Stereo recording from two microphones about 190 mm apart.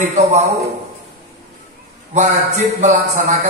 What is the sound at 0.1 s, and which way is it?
Speech, 35° right (ahead or behind).